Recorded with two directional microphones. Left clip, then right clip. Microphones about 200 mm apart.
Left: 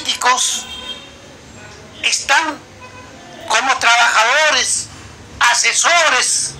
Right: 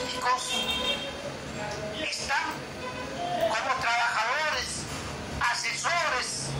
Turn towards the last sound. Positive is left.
turn(degrees=50)  # may be behind; listen again after turning